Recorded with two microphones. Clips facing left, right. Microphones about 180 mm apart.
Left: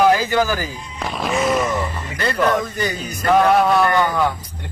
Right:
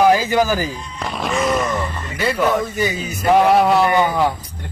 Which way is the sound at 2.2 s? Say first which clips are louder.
Right 1 dB; 5° right (ahead or behind).